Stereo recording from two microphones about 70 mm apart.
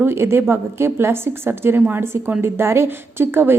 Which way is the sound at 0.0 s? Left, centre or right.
Right.